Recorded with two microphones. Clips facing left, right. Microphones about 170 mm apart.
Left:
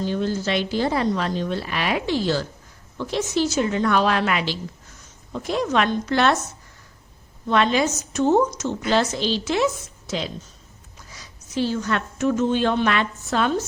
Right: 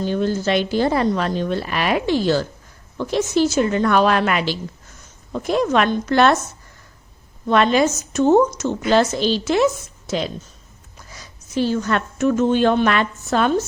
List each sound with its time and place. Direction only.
0.0 s a woman's voice: 55° right (ahead or behind)
7.4 s a woman's voice: 50° right (ahead or behind)